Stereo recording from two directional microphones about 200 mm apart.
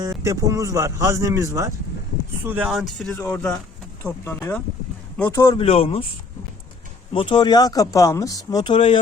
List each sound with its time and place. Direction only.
0.0 s speech: 15° right (ahead or behind); by 6.0 s 30° left (ahead or behind)
7.1 s speech: 25° left (ahead or behind)